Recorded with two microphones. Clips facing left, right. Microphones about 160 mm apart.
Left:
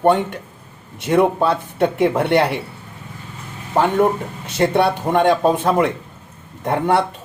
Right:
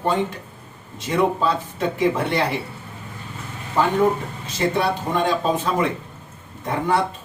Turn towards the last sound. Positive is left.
turn(degrees=65)  # may be behind; listen again after turning